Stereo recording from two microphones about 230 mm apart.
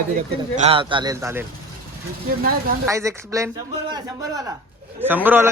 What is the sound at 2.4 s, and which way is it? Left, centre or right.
Speech, right.